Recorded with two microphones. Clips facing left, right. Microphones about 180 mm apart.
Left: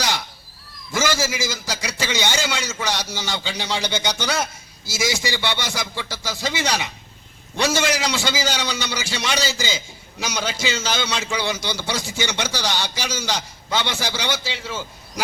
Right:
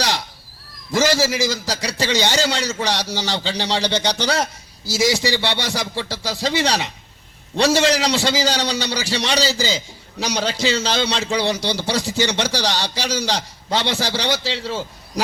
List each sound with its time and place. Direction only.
0.9 s a man's voice: 35° right (ahead or behind)